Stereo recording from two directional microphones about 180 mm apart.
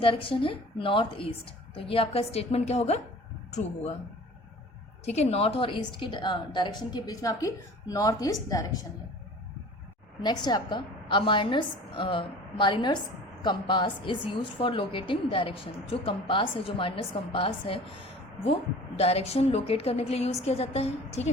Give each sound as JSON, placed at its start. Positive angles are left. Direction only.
{"t": 0.0, "sound": "a woman's voice", "side_deg": 30}
{"t": 5.0, "sound": "a woman's voice", "side_deg": 35}
{"t": 10.2, "sound": "a woman's voice", "side_deg": 25}
{"t": 18.9, "sound": "a woman's voice", "side_deg": 35}